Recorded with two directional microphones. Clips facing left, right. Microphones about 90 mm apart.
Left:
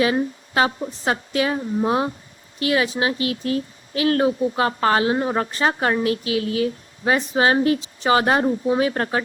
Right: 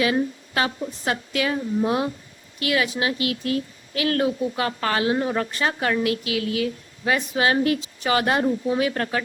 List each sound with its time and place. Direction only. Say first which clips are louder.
0.0 s speech: left 2 dB; 30° left (ahead or behind)